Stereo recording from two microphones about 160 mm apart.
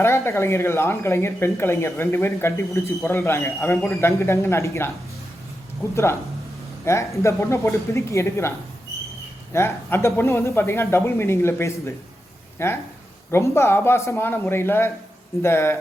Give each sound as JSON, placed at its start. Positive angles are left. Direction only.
{"t": 0.0, "sound": "speech", "side_deg": 15}
{"t": 5.9, "sound": "speech", "side_deg": 15}